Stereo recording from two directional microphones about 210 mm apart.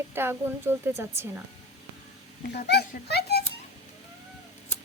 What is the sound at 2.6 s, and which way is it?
Speech, 50° left (ahead or behind).